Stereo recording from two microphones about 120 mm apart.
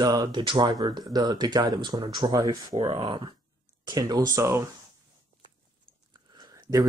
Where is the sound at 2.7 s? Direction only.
50° right (ahead or behind); by 4.7 s 25° right (ahead or behind).